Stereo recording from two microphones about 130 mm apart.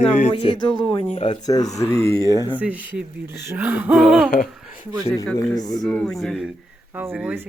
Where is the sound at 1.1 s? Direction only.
45° left (ahead or behind).